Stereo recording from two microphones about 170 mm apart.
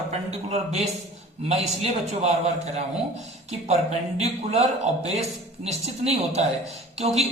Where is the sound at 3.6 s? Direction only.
40° right (ahead or behind).